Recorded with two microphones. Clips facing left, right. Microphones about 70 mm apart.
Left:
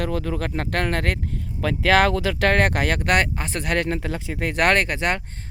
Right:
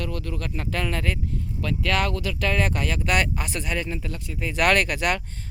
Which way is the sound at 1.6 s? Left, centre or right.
Left.